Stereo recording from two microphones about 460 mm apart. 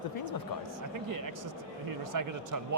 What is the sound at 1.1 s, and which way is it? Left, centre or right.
A man's voice, right.